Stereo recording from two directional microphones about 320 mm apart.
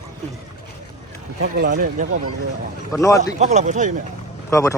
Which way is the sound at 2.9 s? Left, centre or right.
Centre.